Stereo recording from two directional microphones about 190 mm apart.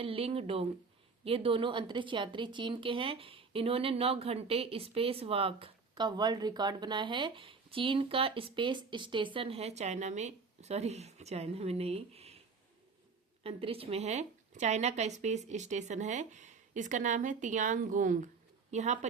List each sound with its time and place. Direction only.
0.0 s a woman's voice: 30° right (ahead or behind)
13.4 s speech: 30° right (ahead or behind)